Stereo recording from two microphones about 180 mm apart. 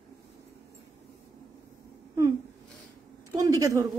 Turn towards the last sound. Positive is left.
turn(degrees=-20)  # may be behind; listen again after turning